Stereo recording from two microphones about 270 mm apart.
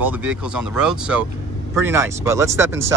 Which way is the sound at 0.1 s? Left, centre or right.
Centre.